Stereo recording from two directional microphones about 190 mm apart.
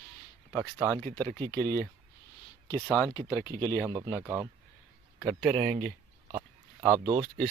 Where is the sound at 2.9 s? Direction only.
15° left (ahead or behind).